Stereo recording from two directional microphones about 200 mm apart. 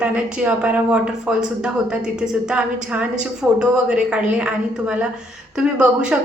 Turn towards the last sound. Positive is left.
turn(degrees=-5)  # may be behind; listen again after turning